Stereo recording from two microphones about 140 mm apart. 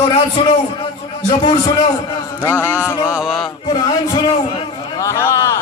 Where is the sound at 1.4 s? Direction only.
30° left (ahead or behind).